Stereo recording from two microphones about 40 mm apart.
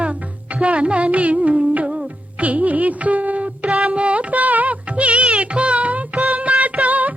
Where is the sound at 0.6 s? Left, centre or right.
Right.